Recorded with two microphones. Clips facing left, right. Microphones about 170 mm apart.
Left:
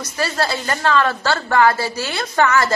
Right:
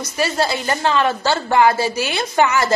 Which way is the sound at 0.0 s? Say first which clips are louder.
Right 2 dB; 15° right (ahead or behind).